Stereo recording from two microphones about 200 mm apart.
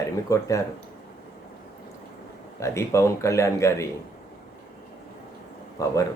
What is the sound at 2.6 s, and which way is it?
Speech, 15° left (ahead or behind).